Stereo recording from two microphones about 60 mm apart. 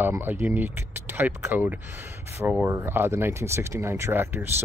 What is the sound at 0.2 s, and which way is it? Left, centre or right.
Speech, right.